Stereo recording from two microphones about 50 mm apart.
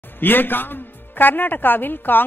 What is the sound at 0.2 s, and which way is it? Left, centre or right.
A man's voice, left.